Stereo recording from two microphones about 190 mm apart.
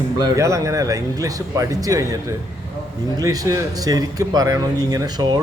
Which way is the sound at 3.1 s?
20° right (ahead or behind).